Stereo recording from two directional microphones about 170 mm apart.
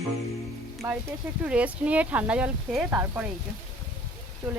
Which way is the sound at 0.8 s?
20° right (ahead or behind).